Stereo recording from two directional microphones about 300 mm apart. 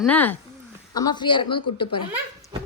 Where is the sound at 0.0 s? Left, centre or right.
Centre.